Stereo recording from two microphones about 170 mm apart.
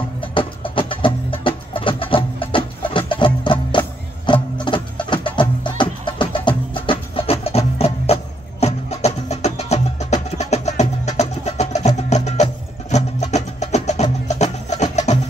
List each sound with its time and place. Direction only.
0.2 s music: 30° left (ahead or behind)
4.3 s music: 30° left (ahead or behind)